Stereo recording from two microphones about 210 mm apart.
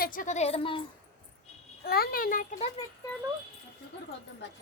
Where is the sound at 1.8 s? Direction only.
45° left (ahead or behind).